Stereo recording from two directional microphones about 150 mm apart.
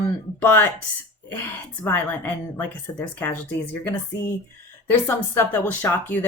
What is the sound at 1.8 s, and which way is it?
Speech, 10° left (ahead or behind).